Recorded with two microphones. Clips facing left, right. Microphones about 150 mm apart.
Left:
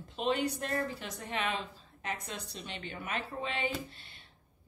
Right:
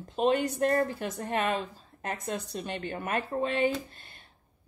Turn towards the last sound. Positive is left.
turn(degrees=-45)  # may be behind; listen again after turning